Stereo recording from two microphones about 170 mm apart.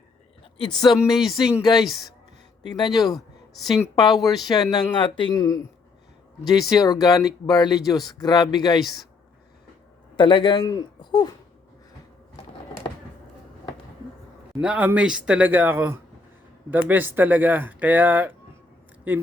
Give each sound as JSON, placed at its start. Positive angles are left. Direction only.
{"t": 0.8, "sound": "speech", "side_deg": 25}
{"t": 1.1, "sound": "speech", "side_deg": 0}
{"t": 1.4, "sound": "speech", "side_deg": 25}
{"t": 1.7, "sound": "speech", "side_deg": 0}
{"t": 2.6, "sound": "speech", "side_deg": 25}
{"t": 3.2, "sound": "a sound", "side_deg": 0}
{"t": 3.8, "sound": "speech", "side_deg": 25}
{"t": 4.2, "sound": "speech", "side_deg": 0}
{"t": 4.4, "sound": "speech", "side_deg": 25}
{"t": 6.7, "sound": "speech", "side_deg": 20}
{"t": 10.2, "sound": "speech", "side_deg": 25}
{"t": 14.6, "sound": "speech", "side_deg": -10}